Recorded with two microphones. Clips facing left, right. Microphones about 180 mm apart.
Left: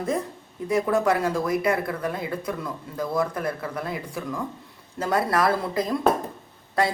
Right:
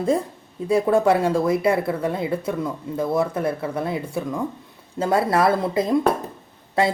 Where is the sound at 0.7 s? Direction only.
25° right (ahead or behind).